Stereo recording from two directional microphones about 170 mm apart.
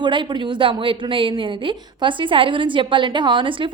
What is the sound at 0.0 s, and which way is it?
A woman's voice, 30° right (ahead or behind).